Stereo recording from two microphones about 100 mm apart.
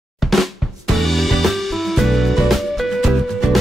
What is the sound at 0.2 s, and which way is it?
Drum, centre (ahead or behind).